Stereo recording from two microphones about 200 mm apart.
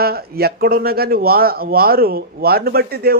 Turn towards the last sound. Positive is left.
turn(degrees=-55)  # may be behind; listen again after turning